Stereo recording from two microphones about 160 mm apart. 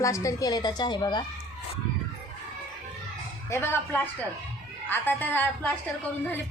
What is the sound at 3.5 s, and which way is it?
Speech, 15° left (ahead or behind).